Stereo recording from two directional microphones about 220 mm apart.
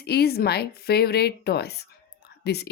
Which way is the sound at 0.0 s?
45° left (ahead or behind).